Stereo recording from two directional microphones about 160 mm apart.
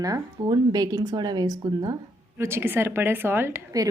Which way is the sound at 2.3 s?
15° right (ahead or behind).